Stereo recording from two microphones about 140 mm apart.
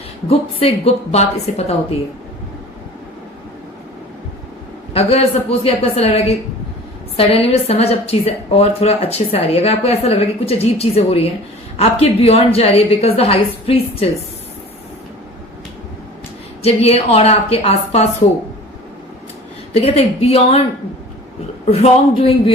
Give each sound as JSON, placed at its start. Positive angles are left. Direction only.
{"t": 0.3, "sound": "a woman's voice", "side_deg": 45}
{"t": 4.9, "sound": "a woman's voice", "side_deg": 45}
{"t": 16.6, "sound": "a woman's voice", "side_deg": 45}
{"t": 19.7, "sound": "a woman's voice", "side_deg": 45}
{"t": 21.7, "sound": "speech", "side_deg": 45}